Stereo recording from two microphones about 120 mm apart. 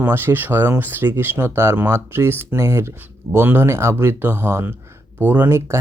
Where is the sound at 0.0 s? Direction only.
15° right (ahead or behind).